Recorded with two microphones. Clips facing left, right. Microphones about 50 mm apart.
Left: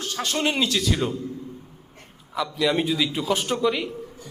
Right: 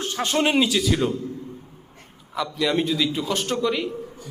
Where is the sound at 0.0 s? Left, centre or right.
Right.